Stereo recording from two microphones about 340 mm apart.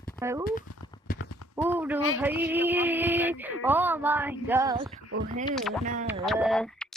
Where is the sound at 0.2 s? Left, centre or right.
Centre.